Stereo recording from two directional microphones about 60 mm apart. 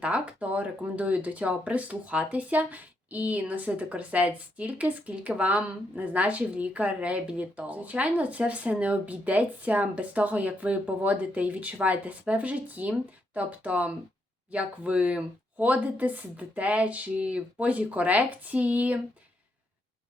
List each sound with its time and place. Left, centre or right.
0.0 s speech: right